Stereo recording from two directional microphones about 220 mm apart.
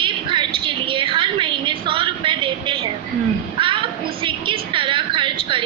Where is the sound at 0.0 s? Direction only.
20° right (ahead or behind).